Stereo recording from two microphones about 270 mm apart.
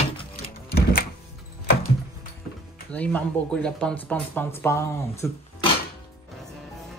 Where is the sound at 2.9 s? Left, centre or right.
Centre.